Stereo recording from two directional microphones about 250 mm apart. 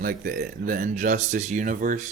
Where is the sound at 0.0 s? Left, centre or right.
Right.